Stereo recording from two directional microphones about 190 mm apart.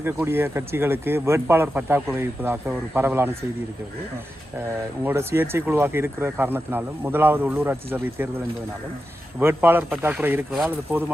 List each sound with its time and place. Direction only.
0.0 s speech: 10° right (ahead or behind)
5.0 s speech: 10° right (ahead or behind)
9.4 s speech: 10° right (ahead or behind)